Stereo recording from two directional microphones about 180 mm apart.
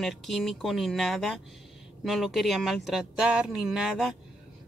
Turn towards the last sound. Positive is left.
turn(degrees=0)  # may be behind; listen again after turning